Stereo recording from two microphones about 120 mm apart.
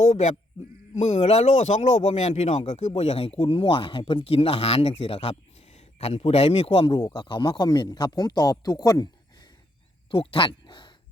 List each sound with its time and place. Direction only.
0.0 s speech: 65° left (ahead or behind); by 9.5 s 30° left (ahead or behind)
10.1 s speech: 45° left (ahead or behind)